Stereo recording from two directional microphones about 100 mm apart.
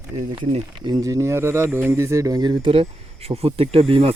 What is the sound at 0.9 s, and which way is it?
Speech, 35° right (ahead or behind).